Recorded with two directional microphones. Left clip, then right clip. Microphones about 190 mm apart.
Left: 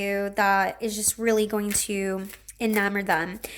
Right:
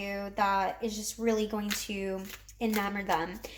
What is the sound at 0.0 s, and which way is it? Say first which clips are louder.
Speech: left 7 dB; 50° left (ahead or behind).